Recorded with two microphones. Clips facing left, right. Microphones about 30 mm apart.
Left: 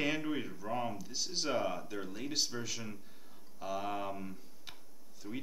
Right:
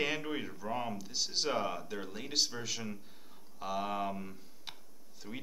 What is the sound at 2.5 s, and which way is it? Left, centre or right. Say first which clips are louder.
Speech: right 1 dB; centre.